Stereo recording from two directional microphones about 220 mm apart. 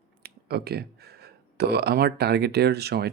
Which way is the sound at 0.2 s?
45° right (ahead or behind).